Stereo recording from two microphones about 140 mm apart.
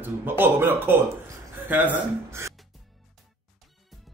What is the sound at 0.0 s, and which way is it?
A man's voice, 15° right (ahead or behind).